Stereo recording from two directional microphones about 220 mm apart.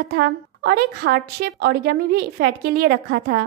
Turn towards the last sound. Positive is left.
turn(degrees=-45)  # may be behind; listen again after turning